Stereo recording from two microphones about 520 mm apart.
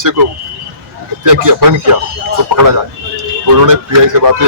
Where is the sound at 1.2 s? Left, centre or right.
Right.